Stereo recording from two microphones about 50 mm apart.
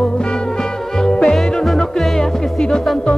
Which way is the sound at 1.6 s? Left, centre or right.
Centre.